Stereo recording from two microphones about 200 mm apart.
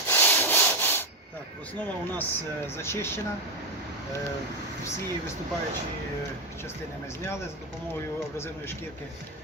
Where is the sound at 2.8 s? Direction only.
10° left (ahead or behind).